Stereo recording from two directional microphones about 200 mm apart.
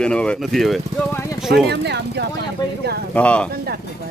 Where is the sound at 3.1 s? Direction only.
5° left (ahead or behind).